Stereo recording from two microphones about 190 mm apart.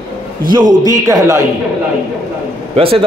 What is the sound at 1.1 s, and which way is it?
Speech, 15° right (ahead or behind).